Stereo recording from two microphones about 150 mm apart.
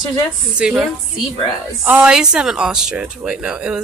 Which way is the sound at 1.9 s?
5° right (ahead or behind).